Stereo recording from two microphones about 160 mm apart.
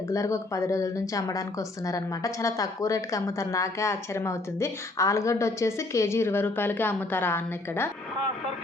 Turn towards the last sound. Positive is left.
turn(degrees=15)  # may be behind; listen again after turning